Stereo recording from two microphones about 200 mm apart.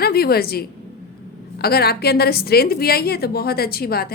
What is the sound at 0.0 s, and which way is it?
A woman's voice, 50° left (ahead or behind).